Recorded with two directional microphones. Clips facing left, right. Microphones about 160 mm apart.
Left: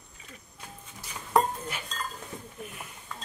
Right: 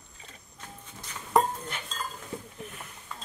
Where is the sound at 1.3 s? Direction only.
Centre (ahead or behind).